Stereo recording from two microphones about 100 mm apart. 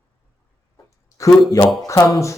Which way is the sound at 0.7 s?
30° left (ahead or behind).